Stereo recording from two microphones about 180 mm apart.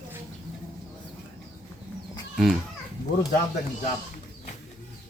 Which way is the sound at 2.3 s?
Centre (ahead or behind).